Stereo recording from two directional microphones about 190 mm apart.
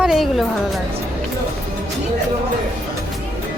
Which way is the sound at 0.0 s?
Centre (ahead or behind).